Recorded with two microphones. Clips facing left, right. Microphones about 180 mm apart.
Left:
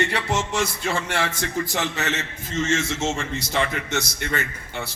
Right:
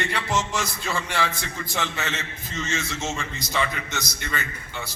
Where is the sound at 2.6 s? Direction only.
50° left (ahead or behind).